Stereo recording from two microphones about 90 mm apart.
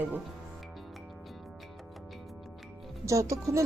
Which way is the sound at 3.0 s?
35° right (ahead or behind).